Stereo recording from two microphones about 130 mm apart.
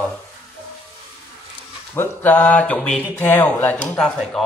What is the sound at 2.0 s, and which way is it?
Speech, 15° left (ahead or behind).